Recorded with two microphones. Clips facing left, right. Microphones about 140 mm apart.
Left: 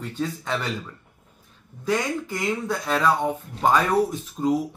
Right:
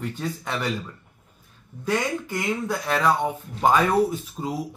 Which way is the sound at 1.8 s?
5° right (ahead or behind).